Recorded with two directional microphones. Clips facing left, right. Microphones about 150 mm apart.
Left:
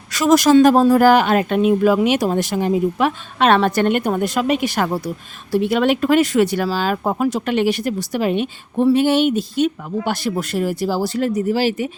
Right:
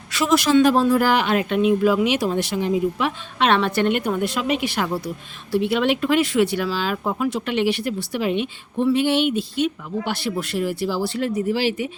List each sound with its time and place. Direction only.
0.1 s speech: 40° left (ahead or behind)